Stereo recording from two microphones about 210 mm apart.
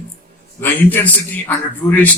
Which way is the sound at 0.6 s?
10° left (ahead or behind).